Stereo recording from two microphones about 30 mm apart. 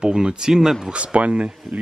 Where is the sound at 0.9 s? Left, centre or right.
Right.